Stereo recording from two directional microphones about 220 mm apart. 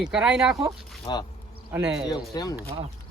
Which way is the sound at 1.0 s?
20° left (ahead or behind).